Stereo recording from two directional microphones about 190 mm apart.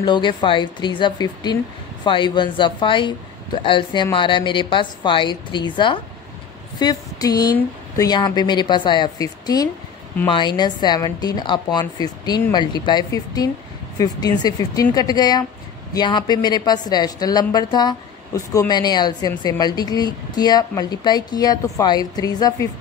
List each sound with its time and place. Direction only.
0.0 s a woman's voice: 25° left (ahead or behind)